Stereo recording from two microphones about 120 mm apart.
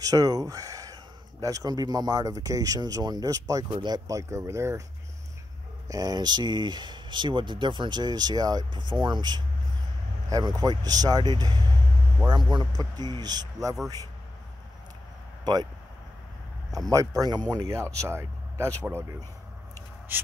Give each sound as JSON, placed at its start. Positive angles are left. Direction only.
{"t": 0.0, "sound": "speech", "side_deg": -30}
{"t": 5.9, "sound": "speech", "side_deg": -30}
{"t": 16.7, "sound": "speech", "side_deg": -30}
{"t": 20.1, "sound": "a sound", "side_deg": -15}